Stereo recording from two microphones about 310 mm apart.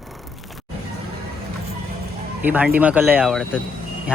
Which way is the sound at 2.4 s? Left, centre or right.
Centre.